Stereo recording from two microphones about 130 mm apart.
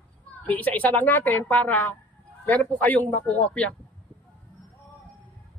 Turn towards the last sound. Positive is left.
turn(degrees=10)  # may be behind; listen again after turning